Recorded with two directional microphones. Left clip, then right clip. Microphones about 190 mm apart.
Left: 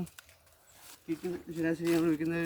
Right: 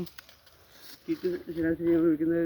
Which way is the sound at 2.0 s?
25° left (ahead or behind).